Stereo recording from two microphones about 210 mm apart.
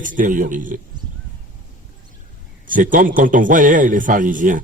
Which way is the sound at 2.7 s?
40° right (ahead or behind).